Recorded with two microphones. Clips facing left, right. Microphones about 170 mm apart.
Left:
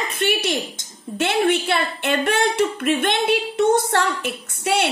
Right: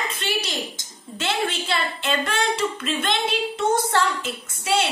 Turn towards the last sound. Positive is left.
turn(degrees=60)  # may be behind; listen again after turning